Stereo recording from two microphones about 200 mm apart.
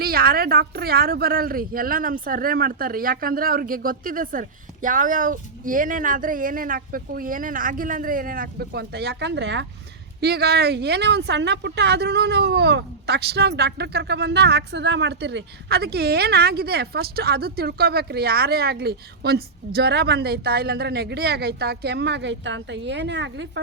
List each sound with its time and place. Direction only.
0.0 s a woman's voice: 50° right (ahead or behind)